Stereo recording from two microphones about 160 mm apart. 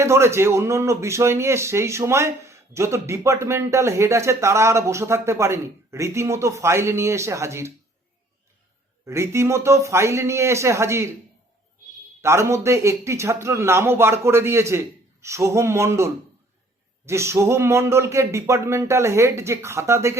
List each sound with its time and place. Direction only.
0.0 s speech: 15° right (ahead or behind)
9.0 s speech: 15° right (ahead or behind)
12.2 s speech: 15° right (ahead or behind)
17.1 s speech: 15° right (ahead or behind)